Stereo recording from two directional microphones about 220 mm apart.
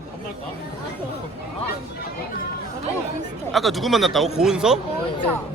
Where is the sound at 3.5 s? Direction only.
Centre (ahead or behind).